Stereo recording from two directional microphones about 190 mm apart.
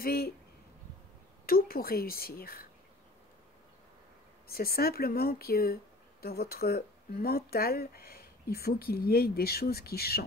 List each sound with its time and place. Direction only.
0.0 s speech: 55° left (ahead or behind)
1.4 s a woman's voice: 50° left (ahead or behind)
4.5 s speech: 50° left (ahead or behind)